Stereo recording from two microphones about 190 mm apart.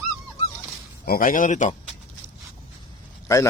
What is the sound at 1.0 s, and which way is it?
Speech, 50° left (ahead or behind).